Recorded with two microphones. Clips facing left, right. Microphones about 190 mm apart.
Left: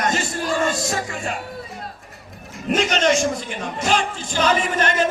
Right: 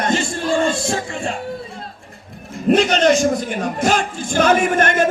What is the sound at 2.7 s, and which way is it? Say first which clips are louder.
Music: right 3 dB; 35° right (ahead or behind).